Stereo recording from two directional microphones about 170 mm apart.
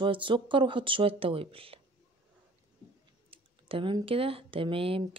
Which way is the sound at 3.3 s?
30° right (ahead or behind).